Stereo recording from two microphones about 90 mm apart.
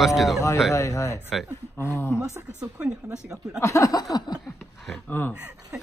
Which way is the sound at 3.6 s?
35° left (ahead or behind).